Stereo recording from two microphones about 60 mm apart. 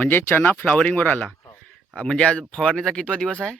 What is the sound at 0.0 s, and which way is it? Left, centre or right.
Speech, left.